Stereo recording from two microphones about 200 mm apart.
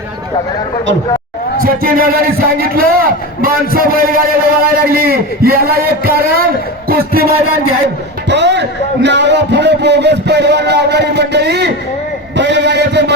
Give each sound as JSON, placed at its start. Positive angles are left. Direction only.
{"t": 1.6, "sound": "a man's voice", "side_deg": -45}
{"t": 8.3, "sound": "a man's voice", "side_deg": -60}